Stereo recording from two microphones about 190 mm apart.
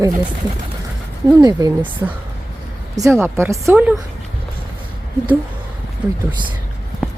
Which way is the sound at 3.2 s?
15° right (ahead or behind).